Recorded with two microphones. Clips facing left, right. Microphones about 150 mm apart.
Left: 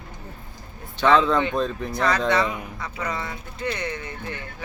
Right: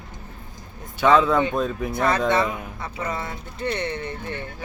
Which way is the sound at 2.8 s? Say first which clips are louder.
Right 1 dB; 25° right (ahead or behind).